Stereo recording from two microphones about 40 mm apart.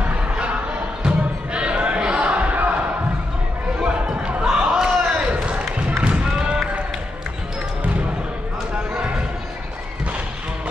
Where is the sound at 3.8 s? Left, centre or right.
Centre.